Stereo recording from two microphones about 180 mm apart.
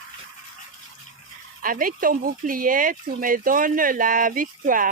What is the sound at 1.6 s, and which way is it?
Speech, 50° right (ahead or behind).